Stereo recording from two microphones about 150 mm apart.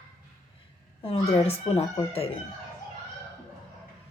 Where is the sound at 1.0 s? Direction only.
40° left (ahead or behind).